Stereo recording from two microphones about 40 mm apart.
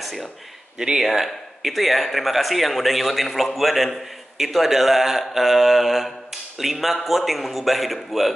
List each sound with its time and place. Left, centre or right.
0.0 s speech: centre
0.7 s speech: centre
1.0 s a man's voice: centre